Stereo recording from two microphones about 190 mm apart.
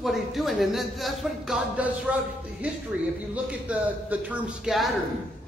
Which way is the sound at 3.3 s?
10° right (ahead or behind).